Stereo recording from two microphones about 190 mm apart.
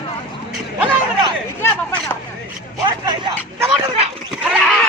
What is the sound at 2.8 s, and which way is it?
Speech, 25° right (ahead or behind).